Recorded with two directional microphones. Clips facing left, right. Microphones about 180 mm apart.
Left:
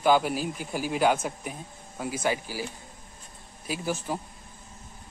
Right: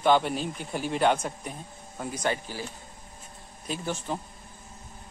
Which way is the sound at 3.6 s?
5° left (ahead or behind).